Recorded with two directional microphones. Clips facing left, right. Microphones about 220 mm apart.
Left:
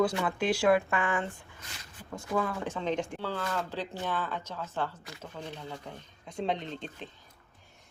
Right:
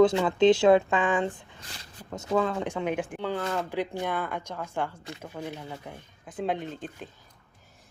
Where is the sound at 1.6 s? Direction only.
35° right (ahead or behind).